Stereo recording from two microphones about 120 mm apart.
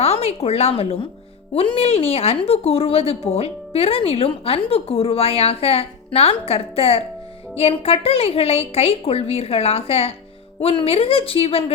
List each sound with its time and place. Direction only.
0.0 s a woman's voice: 60° left (ahead or behind)